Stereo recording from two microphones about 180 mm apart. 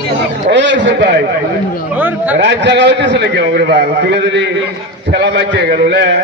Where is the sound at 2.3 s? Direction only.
75° right (ahead or behind).